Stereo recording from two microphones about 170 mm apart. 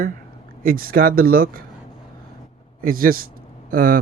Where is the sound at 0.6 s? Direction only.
60° right (ahead or behind).